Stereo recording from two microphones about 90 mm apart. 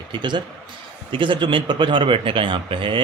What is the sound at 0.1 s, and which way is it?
A man's voice, 55° right (ahead or behind).